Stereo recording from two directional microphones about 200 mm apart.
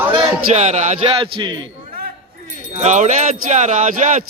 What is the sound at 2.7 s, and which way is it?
Speech, 35° right (ahead or behind).